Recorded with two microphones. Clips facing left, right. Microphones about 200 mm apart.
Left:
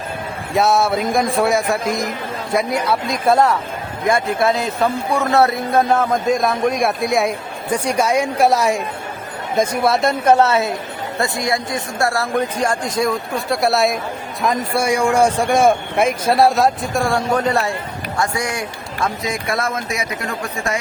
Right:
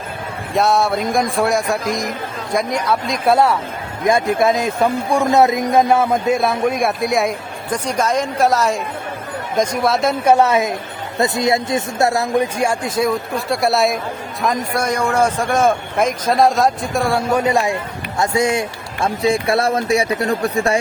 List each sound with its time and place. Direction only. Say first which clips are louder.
0.5 s a man's voice: even; centre (ahead or behind)
9.6 s speech: even; centre (ahead or behind)
10.3 s a man's voice: right 1 dB; 15° right (ahead or behind)
18.2 s a man's voice: right 5 dB; 25° right (ahead or behind)